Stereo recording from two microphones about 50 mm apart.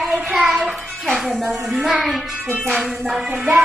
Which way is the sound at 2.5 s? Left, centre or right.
Right.